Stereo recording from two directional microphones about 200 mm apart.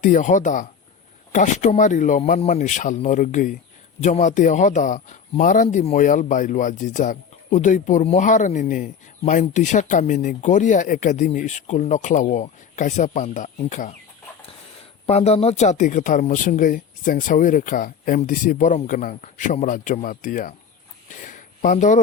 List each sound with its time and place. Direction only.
0.0 s speech: 40° left (ahead or behind)
15.0 s speech: 30° left (ahead or behind)
21.1 s a sound: 40° left (ahead or behind)